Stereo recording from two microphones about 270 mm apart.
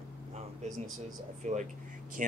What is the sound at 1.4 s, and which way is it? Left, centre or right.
Speech, right.